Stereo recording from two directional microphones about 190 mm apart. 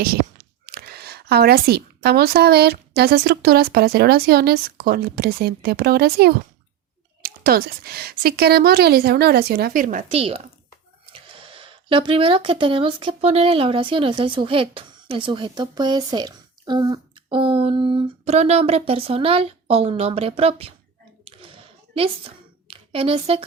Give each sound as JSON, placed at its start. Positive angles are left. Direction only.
{"t": 0.0, "sound": "speech", "side_deg": -55}
{"t": 21.9, "sound": "speech", "side_deg": -30}